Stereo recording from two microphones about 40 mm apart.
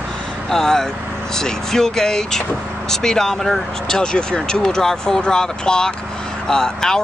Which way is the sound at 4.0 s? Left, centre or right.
Left.